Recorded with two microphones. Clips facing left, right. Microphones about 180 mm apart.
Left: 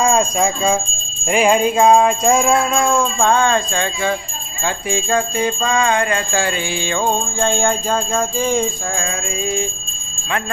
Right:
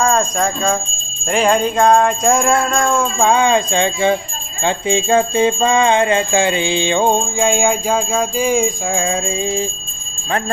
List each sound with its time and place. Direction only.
0.0 s speech: 10° left (ahead or behind)
1.3 s jingle bell: 5° left (ahead or behind); by 8.7 s 10° right (ahead or behind)
9.0 s jingle bell: 25° right (ahead or behind)